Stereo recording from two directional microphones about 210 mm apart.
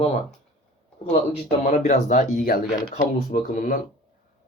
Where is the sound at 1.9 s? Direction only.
35° left (ahead or behind).